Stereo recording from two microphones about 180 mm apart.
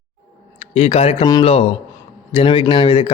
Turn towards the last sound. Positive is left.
turn(degrees=30)  # may be behind; listen again after turning